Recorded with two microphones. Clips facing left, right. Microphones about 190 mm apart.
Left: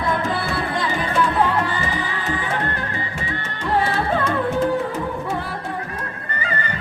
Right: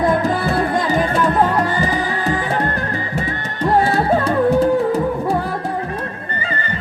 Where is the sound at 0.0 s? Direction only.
45° right (ahead or behind).